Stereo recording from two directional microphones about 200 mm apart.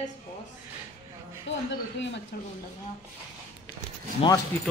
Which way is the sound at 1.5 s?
65° left (ahead or behind).